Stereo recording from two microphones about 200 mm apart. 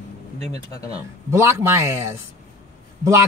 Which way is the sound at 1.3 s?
15° right (ahead or behind).